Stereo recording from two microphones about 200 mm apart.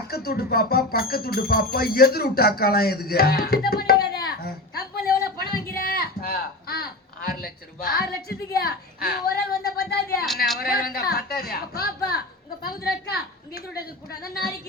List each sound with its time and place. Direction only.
0.1 s music: 50° left (ahead or behind)
8.5 s a woman's voice: 50° left (ahead or behind)